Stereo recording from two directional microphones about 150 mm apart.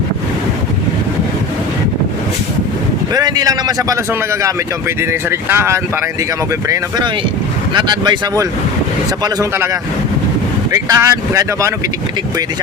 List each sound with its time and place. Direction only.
3.1 s a man's voice: 25° right (ahead or behind)
6.7 s a man's voice: 25° right (ahead or behind)
10.7 s a man's voice: 25° right (ahead or behind)